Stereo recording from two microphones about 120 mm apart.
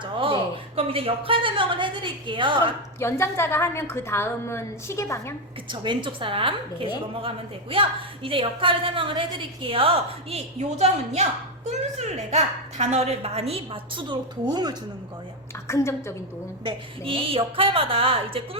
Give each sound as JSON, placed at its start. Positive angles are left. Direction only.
{"t": 0.0, "sound": "a woman's voice", "side_deg": -45}
{"t": 3.0, "sound": "a woman's voice", "side_deg": 20}
{"t": 5.6, "sound": "a woman's voice", "side_deg": -40}
{"t": 14.1, "sound": "speech", "side_deg": -35}
{"t": 15.6, "sound": "a woman's voice", "side_deg": 25}
{"t": 16.6, "sound": "a woman's voice", "side_deg": -50}